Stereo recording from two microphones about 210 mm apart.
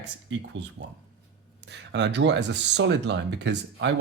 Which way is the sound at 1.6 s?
55° right (ahead or behind).